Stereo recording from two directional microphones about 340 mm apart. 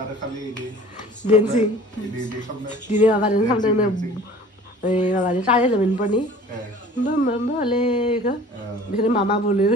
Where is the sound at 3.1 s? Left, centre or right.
Centre.